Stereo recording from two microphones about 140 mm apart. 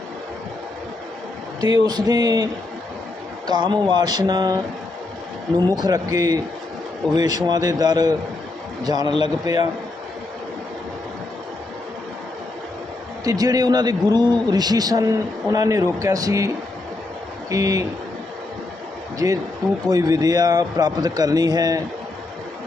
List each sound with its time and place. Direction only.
1.7 s a man's voice: 30° right (ahead or behind)
13.2 s a man's voice: 25° right (ahead or behind)
17.5 s a man's voice: 25° right (ahead or behind)
19.2 s a man's voice: 20° right (ahead or behind)